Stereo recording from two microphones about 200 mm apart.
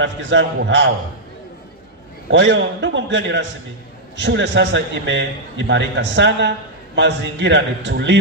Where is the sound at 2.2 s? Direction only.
65° right (ahead or behind).